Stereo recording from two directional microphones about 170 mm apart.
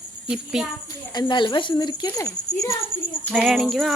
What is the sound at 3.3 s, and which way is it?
Speech, 5° left (ahead or behind).